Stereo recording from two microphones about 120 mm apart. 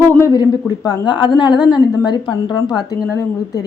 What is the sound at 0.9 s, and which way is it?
A woman's voice, 40° left (ahead or behind).